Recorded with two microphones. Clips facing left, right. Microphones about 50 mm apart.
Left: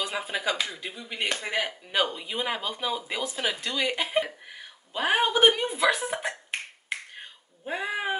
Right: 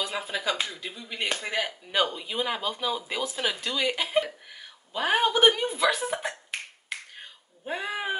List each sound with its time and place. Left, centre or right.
0.0 s speech: centre
6.5 s finger snapping: centre
7.6 s speech: centre